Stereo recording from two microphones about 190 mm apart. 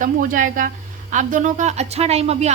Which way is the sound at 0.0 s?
45° right (ahead or behind).